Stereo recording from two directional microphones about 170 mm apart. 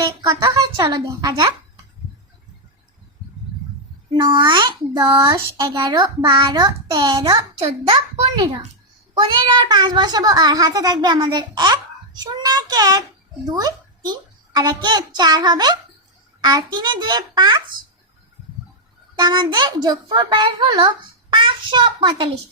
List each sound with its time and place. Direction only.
0.2 s a child's voice: 25° right (ahead or behind)
4.1 s a child's voice: 25° right (ahead or behind)
19.1 s a child's voice: 25° right (ahead or behind)